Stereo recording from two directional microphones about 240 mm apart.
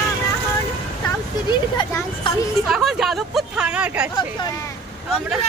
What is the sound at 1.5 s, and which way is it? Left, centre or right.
Speech, centre.